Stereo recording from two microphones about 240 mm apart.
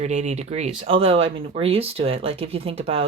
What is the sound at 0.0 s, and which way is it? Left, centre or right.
Speech, right.